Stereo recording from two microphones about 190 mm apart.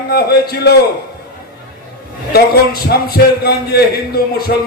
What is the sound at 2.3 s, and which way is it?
A man's voice, 55° left (ahead or behind).